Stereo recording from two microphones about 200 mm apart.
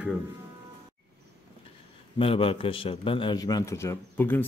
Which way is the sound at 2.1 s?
25° left (ahead or behind).